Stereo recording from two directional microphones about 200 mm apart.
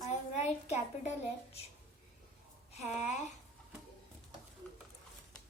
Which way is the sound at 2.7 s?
35° left (ahead or behind).